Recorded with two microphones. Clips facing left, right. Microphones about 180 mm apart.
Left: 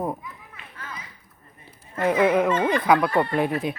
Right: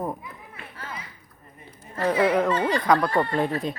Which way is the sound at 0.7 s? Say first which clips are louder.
Right 1 dB; 30° right (ahead or behind).